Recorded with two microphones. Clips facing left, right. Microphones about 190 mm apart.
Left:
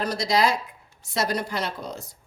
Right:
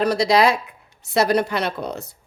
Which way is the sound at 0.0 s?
65° right (ahead or behind).